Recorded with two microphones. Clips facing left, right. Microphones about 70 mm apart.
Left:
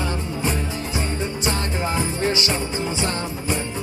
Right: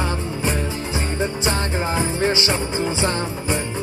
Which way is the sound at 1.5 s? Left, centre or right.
Right.